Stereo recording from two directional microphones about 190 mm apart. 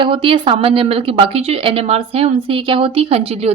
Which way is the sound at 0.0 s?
25° right (ahead or behind).